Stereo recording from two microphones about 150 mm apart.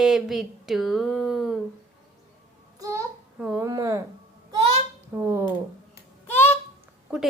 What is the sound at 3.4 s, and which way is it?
Speech, 5° right (ahead or behind).